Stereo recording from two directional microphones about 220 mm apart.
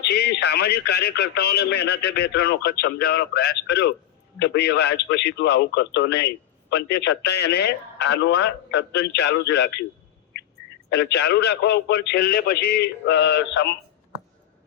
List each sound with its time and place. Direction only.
0.0 s a man's voice: 50° left (ahead or behind)
10.8 s a man's voice: 50° left (ahead or behind)